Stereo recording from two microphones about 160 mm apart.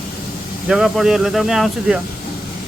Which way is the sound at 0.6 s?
5° right (ahead or behind).